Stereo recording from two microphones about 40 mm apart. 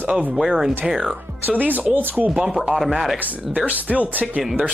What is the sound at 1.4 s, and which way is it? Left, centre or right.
Speech, right.